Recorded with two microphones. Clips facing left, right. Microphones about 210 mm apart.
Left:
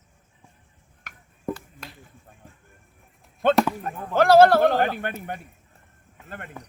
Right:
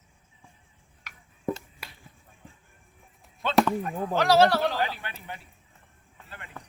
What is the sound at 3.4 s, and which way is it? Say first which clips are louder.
Speech: left 3 dB; 50° left (ahead or behind).